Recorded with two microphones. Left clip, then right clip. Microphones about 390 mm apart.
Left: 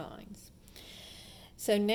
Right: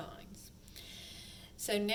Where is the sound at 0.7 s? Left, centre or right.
Centre.